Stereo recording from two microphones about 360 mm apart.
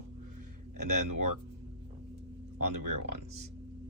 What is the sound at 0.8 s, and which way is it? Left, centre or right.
Speech, right.